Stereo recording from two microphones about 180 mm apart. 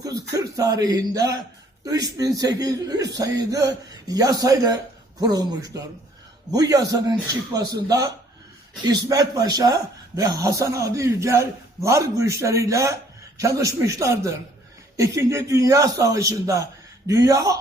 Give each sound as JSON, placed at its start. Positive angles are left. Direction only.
{"t": 0.0, "sound": "speech", "side_deg": -20}